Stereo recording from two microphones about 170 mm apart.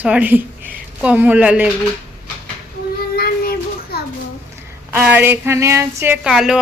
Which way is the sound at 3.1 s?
65° left (ahead or behind).